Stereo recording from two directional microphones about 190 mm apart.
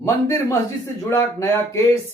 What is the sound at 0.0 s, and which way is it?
Speech, 15° left (ahead or behind).